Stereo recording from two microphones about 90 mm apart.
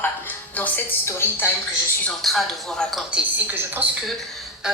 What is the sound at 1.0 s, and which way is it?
Speech, 25° left (ahead or behind).